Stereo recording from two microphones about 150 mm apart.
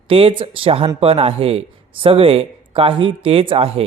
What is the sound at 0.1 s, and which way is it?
Speech, 35° right (ahead or behind).